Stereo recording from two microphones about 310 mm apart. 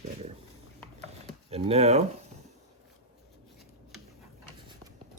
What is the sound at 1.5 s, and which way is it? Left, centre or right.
Speech, centre.